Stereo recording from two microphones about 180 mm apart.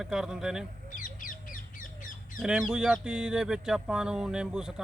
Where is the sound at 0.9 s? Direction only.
50° left (ahead or behind).